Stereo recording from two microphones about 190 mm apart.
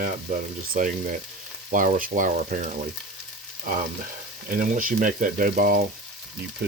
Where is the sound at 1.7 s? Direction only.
45° right (ahead or behind).